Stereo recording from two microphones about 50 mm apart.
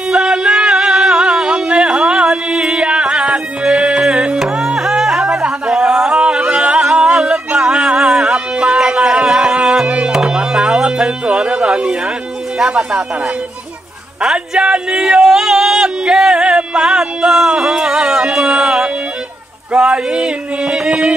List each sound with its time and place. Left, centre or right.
0.1 s music: centre
5.7 s singing: centre
7.2 s music: centre
9.8 s music: right
10.1 s music: centre
12.5 s a sound: centre
14.2 s speech: centre
15.2 s a sound: centre
19.8 s male singing: centre